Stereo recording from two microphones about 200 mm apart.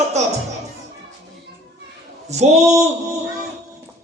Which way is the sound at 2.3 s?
35° right (ahead or behind).